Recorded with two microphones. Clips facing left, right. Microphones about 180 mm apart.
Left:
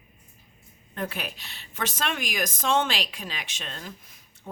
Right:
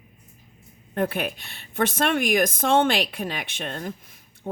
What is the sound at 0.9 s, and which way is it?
Speech, 55° right (ahead or behind).